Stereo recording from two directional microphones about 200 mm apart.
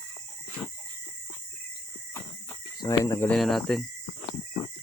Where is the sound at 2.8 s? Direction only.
15° left (ahead or behind).